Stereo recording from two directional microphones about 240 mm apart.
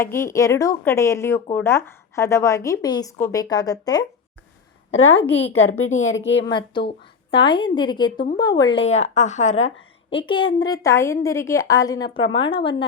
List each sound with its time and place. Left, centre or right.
0.0 s speech: centre
4.9 s a woman's voice: left
6.1 s a woman's voice: left
6.4 s a woman's voice: centre
8.9 s a woman's voice: left